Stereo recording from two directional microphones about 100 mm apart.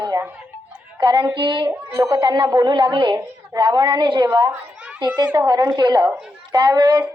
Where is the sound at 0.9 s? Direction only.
50° right (ahead or behind).